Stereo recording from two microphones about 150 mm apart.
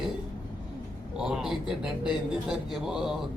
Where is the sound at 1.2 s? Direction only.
5° right (ahead or behind).